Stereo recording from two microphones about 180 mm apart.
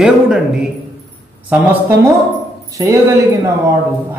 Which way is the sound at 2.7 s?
15° right (ahead or behind).